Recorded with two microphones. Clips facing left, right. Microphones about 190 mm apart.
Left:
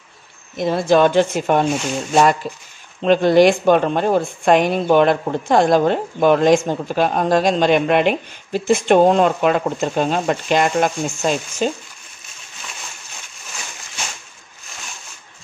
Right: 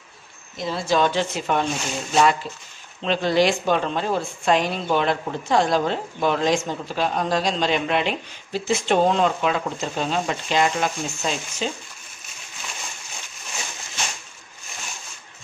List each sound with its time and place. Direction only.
0.6 s speech: 55° left (ahead or behind)
3.0 s speech: 50° left (ahead or behind)